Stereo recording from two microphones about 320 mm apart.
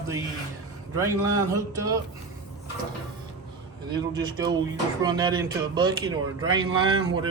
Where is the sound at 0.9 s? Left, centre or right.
Centre.